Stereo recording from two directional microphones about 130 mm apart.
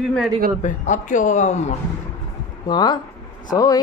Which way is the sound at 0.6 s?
70° left (ahead or behind).